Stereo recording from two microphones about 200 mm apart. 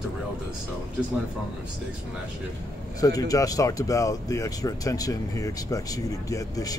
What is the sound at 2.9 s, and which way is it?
Speech, 20° left (ahead or behind).